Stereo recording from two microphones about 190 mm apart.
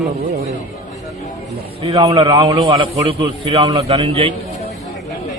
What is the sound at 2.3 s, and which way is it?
A man's voice, 20° right (ahead or behind).